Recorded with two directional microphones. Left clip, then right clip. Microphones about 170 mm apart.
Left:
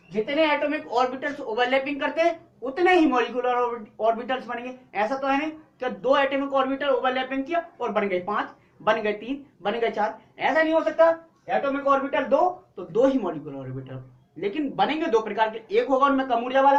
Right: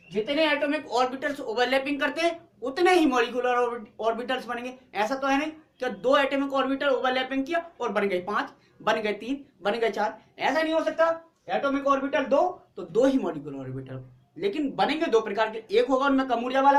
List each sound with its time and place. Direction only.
0.1 s speech: 25° right (ahead or behind)